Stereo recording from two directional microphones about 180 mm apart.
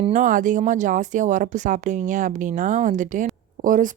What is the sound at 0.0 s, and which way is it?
Speech, 45° right (ahead or behind).